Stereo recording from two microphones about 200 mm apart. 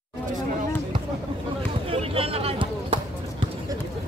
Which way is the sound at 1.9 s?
30° right (ahead or behind).